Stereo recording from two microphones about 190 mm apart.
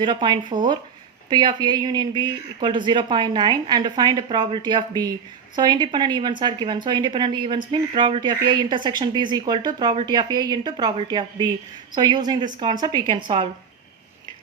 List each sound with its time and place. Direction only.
0.0 s speech: 25° right (ahead or behind)